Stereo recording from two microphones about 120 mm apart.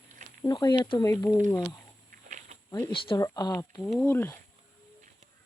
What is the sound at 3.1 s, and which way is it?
Speech, 30° left (ahead or behind).